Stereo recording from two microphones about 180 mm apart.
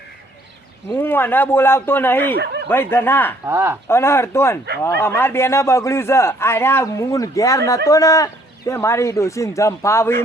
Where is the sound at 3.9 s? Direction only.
15° left (ahead or behind).